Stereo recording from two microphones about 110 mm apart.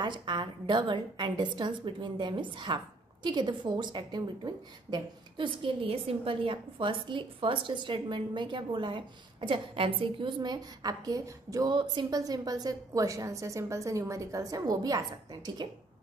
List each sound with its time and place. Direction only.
0.0 s a woman's voice: 45° right (ahead or behind)